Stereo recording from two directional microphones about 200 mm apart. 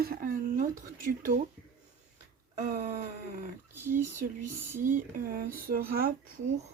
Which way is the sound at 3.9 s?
40° right (ahead or behind).